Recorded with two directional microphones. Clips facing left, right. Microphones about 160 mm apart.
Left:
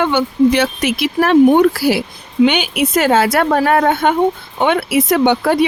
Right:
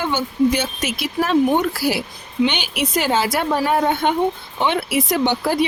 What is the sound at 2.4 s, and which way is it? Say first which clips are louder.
A woman's voice: left 7 dB; 60° left (ahead or behind).